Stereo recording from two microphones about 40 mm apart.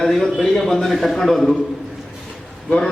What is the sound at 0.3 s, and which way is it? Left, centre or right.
A man's voice, centre.